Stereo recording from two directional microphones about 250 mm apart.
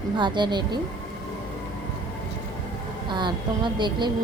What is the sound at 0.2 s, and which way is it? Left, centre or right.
Speech, centre.